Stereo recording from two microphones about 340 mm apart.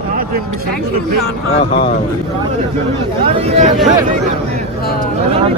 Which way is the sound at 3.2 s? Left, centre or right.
Centre.